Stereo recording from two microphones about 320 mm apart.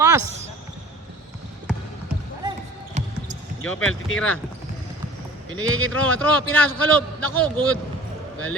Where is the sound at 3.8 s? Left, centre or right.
Left.